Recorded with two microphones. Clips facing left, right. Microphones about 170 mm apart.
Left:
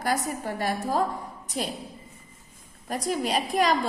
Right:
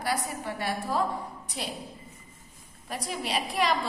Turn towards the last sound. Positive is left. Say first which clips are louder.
# left 4 dB
turn(degrees=45)  # may be behind; listen again after turning